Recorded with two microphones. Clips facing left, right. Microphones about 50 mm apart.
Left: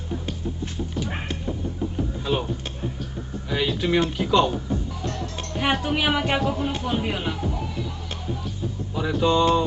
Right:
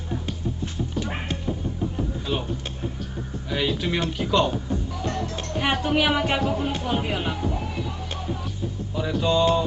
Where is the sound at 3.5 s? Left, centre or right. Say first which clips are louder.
Even; centre.